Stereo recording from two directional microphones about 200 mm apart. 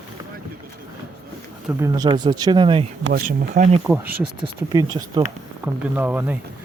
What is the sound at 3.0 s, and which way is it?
Speech, 50° right (ahead or behind).